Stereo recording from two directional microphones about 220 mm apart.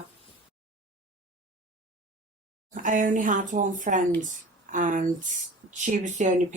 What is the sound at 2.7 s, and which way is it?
A woman's voice, 35° right (ahead or behind).